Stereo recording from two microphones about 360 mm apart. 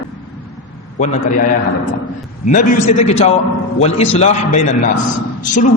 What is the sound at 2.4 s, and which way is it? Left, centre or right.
A man's voice, left.